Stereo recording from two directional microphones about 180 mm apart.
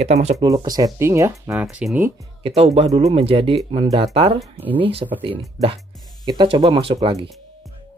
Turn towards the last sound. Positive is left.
turn(degrees=-25)  # may be behind; listen again after turning